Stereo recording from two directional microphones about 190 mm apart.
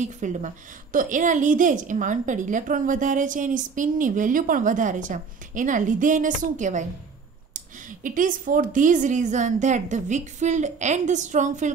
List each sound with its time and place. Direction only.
0.0 s a woman's voice: 40° right (ahead or behind)
8.0 s a woman's voice: 45° right (ahead or behind)